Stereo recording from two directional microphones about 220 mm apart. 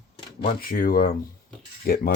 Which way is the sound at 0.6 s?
40° left (ahead or behind).